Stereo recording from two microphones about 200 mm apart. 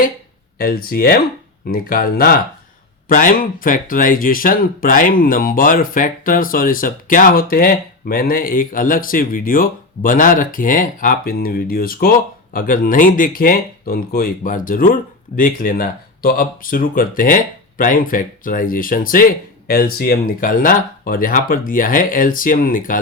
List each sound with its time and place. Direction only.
0.6 s speech: 50° left (ahead or behind)